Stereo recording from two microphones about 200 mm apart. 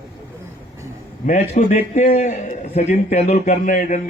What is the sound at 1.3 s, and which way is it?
A man's voice, 35° left (ahead or behind).